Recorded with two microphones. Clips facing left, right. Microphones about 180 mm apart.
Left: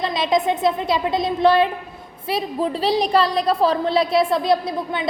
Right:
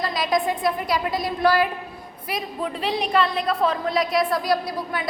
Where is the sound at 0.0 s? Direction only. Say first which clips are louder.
Left 3 dB; 25° left (ahead or behind).